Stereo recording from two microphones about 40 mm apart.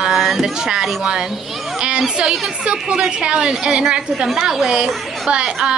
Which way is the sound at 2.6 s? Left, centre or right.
Right.